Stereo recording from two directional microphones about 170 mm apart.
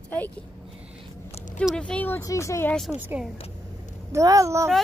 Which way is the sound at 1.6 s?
5° left (ahead or behind).